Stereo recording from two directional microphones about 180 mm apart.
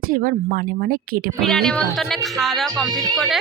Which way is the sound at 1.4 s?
Centre (ahead or behind).